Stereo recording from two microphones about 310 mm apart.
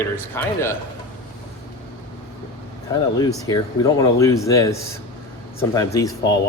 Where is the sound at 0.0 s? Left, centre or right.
Centre.